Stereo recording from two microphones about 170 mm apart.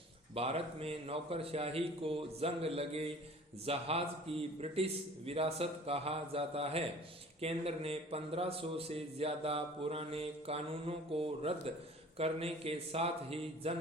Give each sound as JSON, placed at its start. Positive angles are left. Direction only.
{"t": 0.3, "sound": "speech", "side_deg": -35}